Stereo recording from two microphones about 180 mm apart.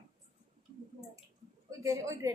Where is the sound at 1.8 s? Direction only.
15° right (ahead or behind).